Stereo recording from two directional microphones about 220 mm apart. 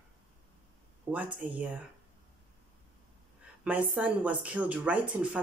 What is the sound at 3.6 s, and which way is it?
Speech, 5° right (ahead or behind).